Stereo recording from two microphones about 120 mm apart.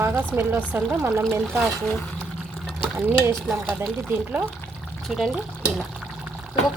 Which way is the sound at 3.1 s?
20° right (ahead or behind).